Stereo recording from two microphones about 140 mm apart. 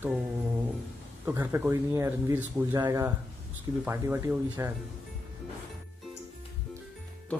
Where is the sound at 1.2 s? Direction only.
15° right (ahead or behind).